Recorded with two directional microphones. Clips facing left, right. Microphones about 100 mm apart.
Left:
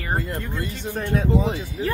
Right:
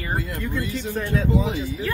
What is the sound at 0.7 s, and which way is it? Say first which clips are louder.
Speech: left 3 dB; 60° left (ahead or behind).